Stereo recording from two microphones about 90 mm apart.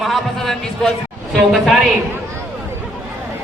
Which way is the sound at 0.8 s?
5° left (ahead or behind).